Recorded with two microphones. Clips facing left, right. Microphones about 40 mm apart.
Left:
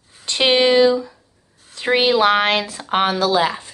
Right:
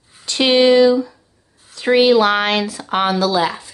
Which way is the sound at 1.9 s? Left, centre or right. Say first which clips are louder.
Right 2 dB; left.